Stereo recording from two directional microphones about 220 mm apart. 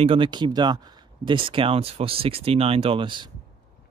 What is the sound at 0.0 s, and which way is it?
Speech, 25° right (ahead or behind).